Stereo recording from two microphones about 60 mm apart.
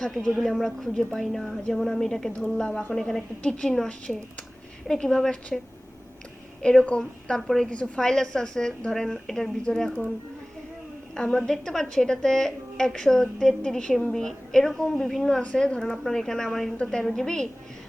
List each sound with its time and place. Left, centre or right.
0.0 s a woman's voice: centre
6.6 s a woman's voice: centre
11.1 s a woman's voice: centre